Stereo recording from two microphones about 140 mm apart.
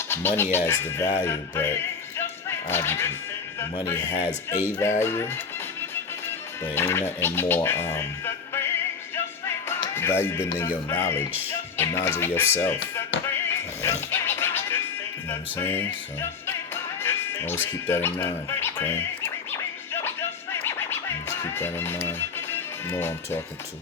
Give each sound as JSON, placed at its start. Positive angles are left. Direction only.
{"t": 0.1, "sound": "speech", "side_deg": 15}
{"t": 4.8, "sound": "speech", "side_deg": 20}
{"t": 6.7, "sound": "speech", "side_deg": 15}
{"t": 9.1, "sound": "music", "side_deg": 20}
{"t": 10.8, "sound": "speech", "side_deg": 15}
{"t": 13.3, "sound": "music", "side_deg": 15}
{"t": 15.3, "sound": "speech", "side_deg": 15}
{"t": 17.0, "sound": "speech", "side_deg": 15}
{"t": 19.5, "sound": "music", "side_deg": 15}